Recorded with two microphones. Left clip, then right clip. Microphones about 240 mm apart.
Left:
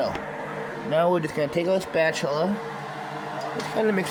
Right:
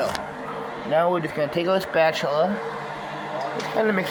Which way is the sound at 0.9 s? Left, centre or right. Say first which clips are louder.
Right 1 dB; centre.